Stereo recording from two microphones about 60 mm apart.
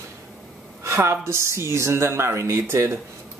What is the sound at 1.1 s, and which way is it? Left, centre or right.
Speech, right.